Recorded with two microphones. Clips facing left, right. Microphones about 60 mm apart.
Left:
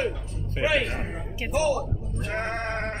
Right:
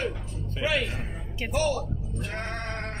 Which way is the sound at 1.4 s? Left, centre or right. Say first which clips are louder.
Left 2 dB; centre.